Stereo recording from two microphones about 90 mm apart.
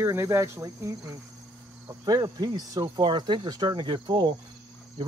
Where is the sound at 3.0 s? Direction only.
60° right (ahead or behind).